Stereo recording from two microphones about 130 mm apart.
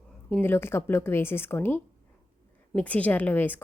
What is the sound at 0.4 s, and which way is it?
A woman's voice, 20° left (ahead or behind).